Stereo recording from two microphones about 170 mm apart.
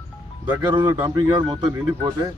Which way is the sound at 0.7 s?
25° right (ahead or behind).